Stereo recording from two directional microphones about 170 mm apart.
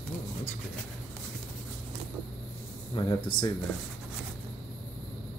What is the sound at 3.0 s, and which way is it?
Speech, 25° left (ahead or behind).